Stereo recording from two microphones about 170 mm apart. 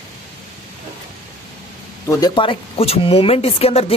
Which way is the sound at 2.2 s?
30° left (ahead or behind).